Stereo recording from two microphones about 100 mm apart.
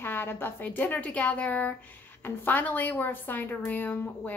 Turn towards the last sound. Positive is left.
turn(degrees=20)  # may be behind; listen again after turning